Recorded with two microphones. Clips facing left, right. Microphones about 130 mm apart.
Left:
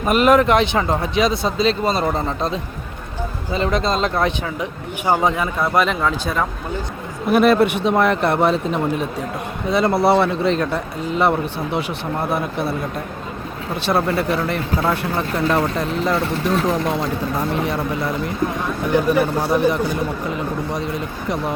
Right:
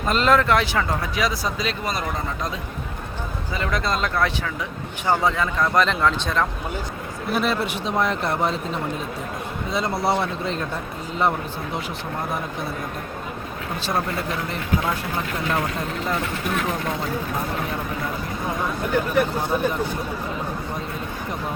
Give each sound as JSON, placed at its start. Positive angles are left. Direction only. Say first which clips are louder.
{"t": 0.0, "sound": "speech", "louder": "left 5 dB", "side_deg": 15}
{"t": 7.3, "sound": "speech", "louder": "left 9 dB", "side_deg": 60}
{"t": 13.8, "sound": "speech", "louder": "left 7 dB", "side_deg": 70}
{"t": 19.0, "sound": "speech", "louder": "left 4 dB", "side_deg": 90}